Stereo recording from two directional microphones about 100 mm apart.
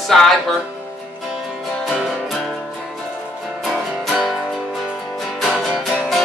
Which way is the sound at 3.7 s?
Centre (ahead or behind).